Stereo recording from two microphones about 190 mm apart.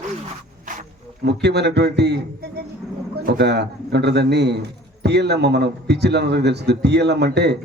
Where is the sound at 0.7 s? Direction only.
45° right (ahead or behind).